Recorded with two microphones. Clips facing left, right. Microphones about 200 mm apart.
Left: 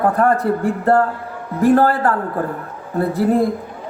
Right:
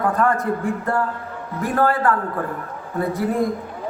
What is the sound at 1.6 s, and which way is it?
Speech, 35° left (ahead or behind).